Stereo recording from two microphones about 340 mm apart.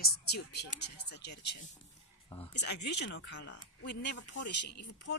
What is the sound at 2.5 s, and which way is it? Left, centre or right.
Speech, left.